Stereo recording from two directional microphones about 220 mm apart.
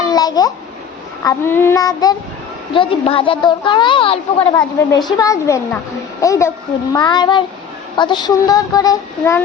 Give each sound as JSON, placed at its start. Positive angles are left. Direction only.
{"t": 0.0, "sound": "babbling", "side_deg": 15}
{"t": 1.2, "sound": "a woman's voice", "side_deg": 10}